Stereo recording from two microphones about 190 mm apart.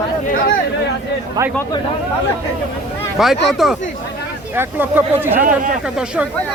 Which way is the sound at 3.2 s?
Centre (ahead or behind).